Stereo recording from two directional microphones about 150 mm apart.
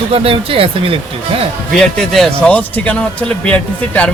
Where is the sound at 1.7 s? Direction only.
5° left (ahead or behind).